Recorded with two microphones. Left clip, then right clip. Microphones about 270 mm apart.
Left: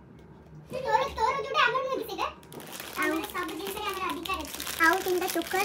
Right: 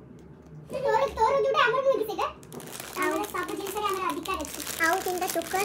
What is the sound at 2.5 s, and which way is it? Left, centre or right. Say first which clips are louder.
Crumpling: right 1 dB; centre.